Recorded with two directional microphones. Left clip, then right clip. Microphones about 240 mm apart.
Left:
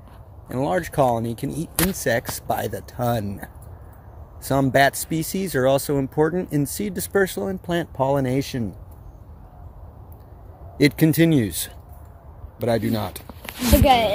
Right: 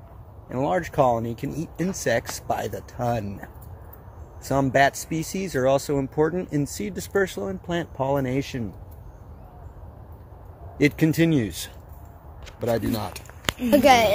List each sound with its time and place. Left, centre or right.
0.5 s speech: left
10.8 s speech: left
13.8 s speech: centre